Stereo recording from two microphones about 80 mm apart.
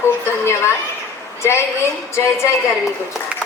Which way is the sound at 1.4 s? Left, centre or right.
Left.